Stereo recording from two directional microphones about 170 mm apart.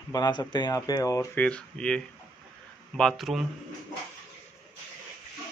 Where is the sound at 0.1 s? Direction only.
25° left (ahead or behind); by 3.4 s centre (ahead or behind).